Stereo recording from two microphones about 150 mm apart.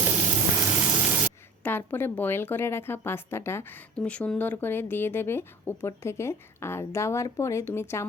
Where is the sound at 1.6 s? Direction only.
15° left (ahead or behind).